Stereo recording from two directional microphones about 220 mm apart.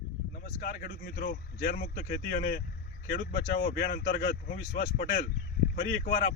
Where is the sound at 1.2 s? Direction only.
45° left (ahead or behind).